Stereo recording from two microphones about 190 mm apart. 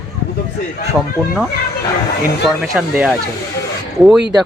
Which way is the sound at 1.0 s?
Centre (ahead or behind).